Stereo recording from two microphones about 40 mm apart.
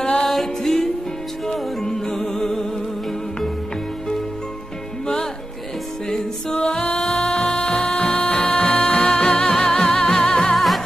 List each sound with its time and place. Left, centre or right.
0.0 s music: centre
6.5 s music: left
7.8 s music: left